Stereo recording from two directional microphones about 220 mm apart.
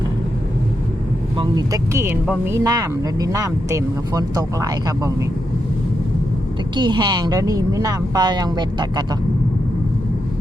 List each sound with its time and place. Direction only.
1.4 s speech: 15° right (ahead or behind)
6.7 s speech: 20° right (ahead or behind)